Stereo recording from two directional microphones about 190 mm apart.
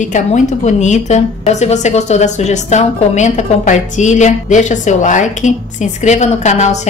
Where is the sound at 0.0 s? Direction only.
40° left (ahead or behind).